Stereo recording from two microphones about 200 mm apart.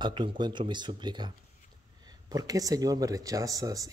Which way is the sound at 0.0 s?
25° right (ahead or behind).